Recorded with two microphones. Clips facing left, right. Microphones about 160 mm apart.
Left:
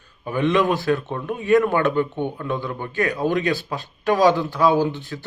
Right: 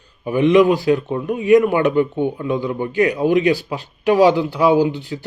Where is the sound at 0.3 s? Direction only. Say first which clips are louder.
Right 6 dB; 15° right (ahead or behind).